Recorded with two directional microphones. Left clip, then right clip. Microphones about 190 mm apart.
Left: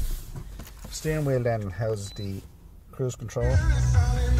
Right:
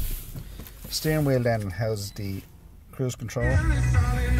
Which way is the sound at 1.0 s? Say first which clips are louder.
Right 2 dB; 20° right (ahead or behind).